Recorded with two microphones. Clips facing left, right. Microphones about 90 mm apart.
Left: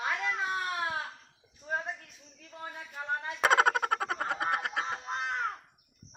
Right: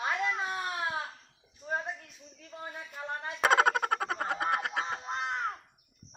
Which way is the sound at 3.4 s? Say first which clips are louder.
Even; centre (ahead or behind).